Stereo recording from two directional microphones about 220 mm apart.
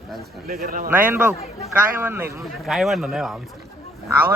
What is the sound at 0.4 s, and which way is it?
Speech, 40° right (ahead or behind).